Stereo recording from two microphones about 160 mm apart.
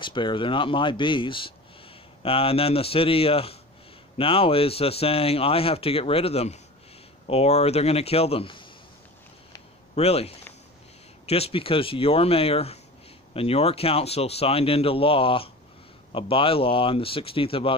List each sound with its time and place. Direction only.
0.0 s speech: 30° left (ahead or behind)
9.9 s speech: 40° left (ahead or behind)